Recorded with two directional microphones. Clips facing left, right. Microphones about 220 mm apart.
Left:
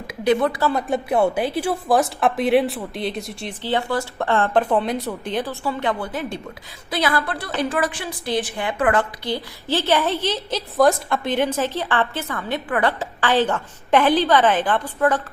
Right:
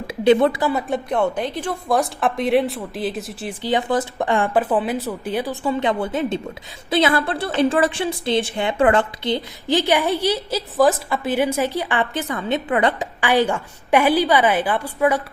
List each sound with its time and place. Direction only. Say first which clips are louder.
0.1 s speech: right 4 dB; 30° right (ahead or behind)
0.7 s a woman's voice: left 1 dB; centre (ahead or behind)
3.6 s a woman's voice: right 3 dB; 15° right (ahead or behind)
5.6 s a woman's voice: right 3 dB; 20° right (ahead or behind)